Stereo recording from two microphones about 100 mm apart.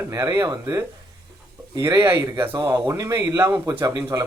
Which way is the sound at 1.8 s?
25° right (ahead or behind).